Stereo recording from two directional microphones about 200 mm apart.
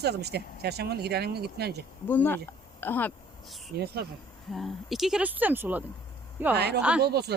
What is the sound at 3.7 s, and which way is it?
Speech, 50° right (ahead or behind).